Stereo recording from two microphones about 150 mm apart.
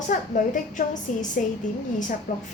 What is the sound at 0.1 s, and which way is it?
A woman's voice, 60° left (ahead or behind).